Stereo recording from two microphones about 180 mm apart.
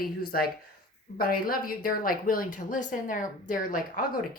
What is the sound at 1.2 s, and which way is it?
A woman's voice, 55° left (ahead or behind).